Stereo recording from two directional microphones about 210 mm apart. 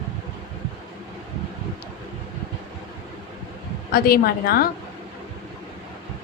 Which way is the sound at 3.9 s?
45° left (ahead or behind).